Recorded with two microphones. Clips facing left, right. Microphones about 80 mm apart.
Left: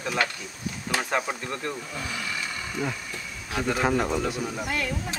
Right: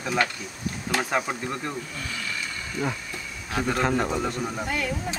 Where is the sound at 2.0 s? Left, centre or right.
Centre.